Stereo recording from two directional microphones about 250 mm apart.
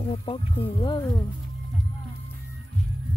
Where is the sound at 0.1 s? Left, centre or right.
Left.